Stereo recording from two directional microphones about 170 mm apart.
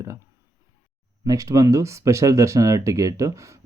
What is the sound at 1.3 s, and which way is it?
Speech, 20° right (ahead or behind).